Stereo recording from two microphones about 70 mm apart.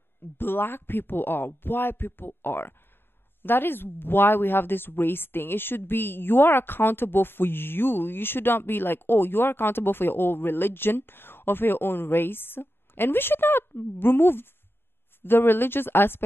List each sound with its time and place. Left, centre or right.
0.4 s speech: left